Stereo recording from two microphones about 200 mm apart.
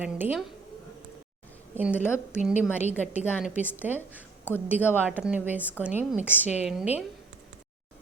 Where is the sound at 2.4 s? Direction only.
40° left (ahead or behind).